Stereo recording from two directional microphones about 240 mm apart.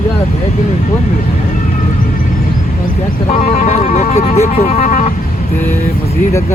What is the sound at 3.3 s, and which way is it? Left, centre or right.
Speech, left.